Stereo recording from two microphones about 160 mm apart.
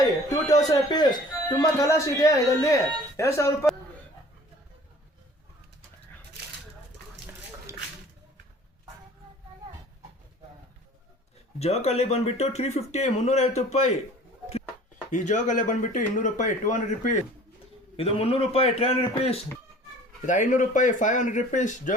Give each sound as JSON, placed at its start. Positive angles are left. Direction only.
{"t": 0.0, "sound": "a man's voice", "side_deg": 20}
{"t": 11.6, "sound": "speech", "side_deg": 40}
{"t": 15.1, "sound": "speech", "side_deg": 50}
{"t": 17.9, "sound": "speech", "side_deg": 35}
{"t": 20.2, "sound": "speech", "side_deg": 55}